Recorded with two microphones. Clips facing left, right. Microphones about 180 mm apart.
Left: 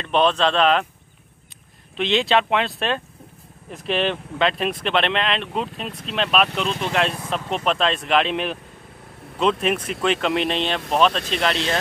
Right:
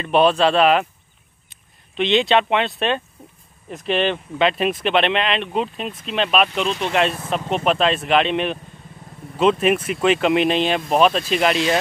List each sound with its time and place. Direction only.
0.0 s speech: 10° right (ahead or behind)
2.0 s speech: centre (ahead or behind)